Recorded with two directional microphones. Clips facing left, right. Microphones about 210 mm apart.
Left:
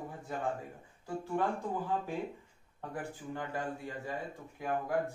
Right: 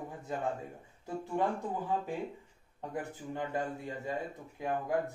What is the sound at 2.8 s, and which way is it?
Speech, 20° right (ahead or behind).